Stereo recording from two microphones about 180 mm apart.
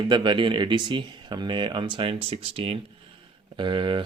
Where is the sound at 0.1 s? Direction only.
25° right (ahead or behind).